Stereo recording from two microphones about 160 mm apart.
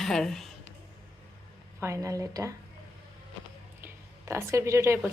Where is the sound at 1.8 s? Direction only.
20° right (ahead or behind).